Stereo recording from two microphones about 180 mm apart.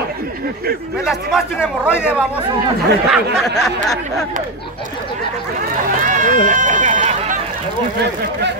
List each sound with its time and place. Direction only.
1.0 s a man's voice: 5° right (ahead or behind)
1.9 s speech: 10° left (ahead or behind)
3.1 s a man's voice: centre (ahead or behind)
6.0 s run: 45° right (ahead or behind)
8.0 s speech: 70° right (ahead or behind)